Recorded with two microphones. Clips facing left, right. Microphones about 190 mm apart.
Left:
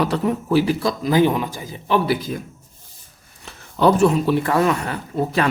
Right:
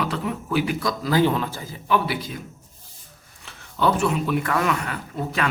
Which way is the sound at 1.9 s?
40° left (ahead or behind).